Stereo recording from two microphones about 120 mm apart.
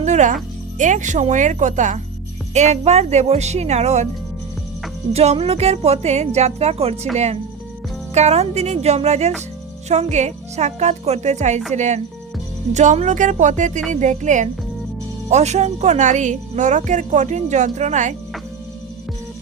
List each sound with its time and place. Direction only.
0.0 s music: 85° right
0.8 s speech: 90° right
2.5 s speech: 65° right (ahead or behind)
5.1 s speech: 60° right (ahead or behind)
8.1 s speech: 65° right (ahead or behind); by 14.5 s 85° right
15.3 s speech: 70° right (ahead or behind)